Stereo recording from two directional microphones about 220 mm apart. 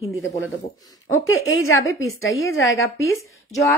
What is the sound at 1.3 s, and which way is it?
A woman's voice, 65° left (ahead or behind).